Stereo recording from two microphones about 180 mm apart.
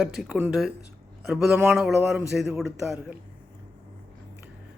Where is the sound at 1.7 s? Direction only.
Centre (ahead or behind).